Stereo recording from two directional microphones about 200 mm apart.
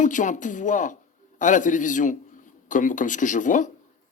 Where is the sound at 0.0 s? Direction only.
40° left (ahead or behind).